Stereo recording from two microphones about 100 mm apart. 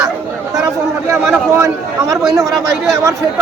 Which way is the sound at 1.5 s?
30° right (ahead or behind).